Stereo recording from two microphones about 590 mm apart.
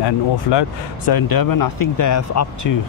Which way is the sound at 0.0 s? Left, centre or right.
Left.